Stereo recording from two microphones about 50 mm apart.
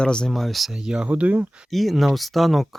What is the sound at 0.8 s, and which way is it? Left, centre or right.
Speech, centre.